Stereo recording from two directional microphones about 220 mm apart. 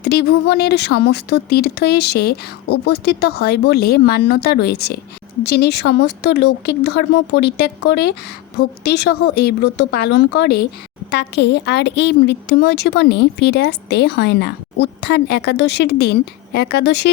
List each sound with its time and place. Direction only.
0.0 s a woman's voice: 45° left (ahead or behind)